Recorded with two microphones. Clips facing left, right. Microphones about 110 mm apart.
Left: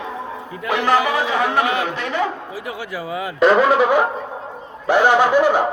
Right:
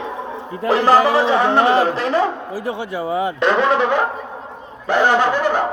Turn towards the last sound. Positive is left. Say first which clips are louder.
# left 2 dB
turn(degrees=10)  # may be behind; listen again after turning